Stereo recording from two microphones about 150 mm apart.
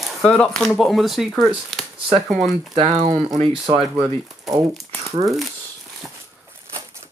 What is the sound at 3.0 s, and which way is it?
Speech, 55° right (ahead or behind).